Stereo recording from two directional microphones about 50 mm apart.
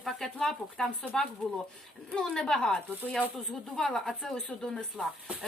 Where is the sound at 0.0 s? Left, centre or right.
Centre.